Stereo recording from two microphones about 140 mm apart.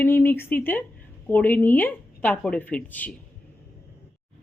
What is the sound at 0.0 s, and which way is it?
Speech, 15° left (ahead or behind).